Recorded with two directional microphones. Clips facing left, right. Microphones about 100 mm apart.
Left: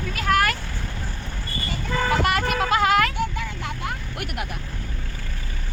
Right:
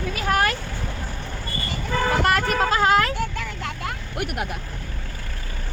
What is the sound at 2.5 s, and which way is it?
Speech, 35° right (ahead or behind).